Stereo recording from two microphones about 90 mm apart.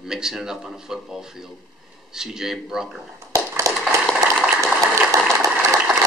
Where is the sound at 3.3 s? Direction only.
40° right (ahead or behind).